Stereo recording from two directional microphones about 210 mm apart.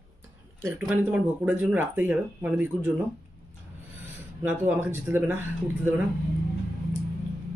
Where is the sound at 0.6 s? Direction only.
10° right (ahead or behind).